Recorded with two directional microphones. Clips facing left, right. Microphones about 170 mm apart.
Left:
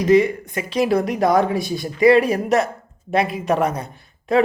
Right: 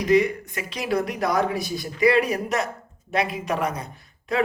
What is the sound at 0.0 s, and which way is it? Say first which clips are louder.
Speech: left 4 dB; 25° left (ahead or behind).